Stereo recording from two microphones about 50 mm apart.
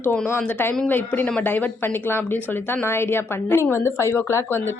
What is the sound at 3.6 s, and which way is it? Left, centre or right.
Speech, left.